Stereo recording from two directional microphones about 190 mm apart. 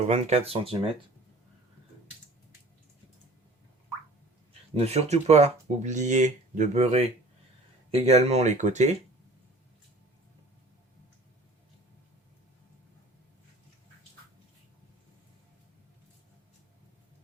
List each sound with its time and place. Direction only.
0.0 s speech: 35° right (ahead or behind)
4.7 s speech: 35° right (ahead or behind)